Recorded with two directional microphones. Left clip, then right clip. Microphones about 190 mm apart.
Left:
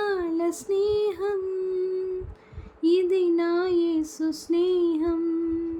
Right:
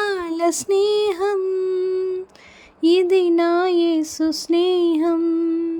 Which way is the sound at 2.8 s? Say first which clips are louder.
Right 6 dB; 50° right (ahead or behind).